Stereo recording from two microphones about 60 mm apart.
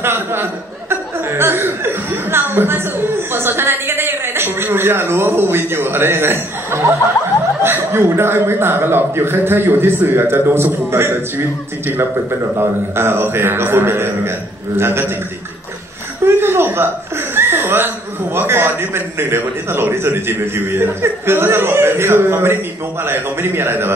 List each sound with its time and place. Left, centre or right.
0.0 s chuckle: right
7.6 s a man's voice: right
16.3 s a sound: right
17.4 s a man's voice: right